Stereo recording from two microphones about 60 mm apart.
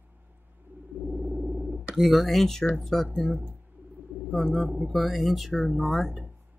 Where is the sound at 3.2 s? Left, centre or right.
Centre.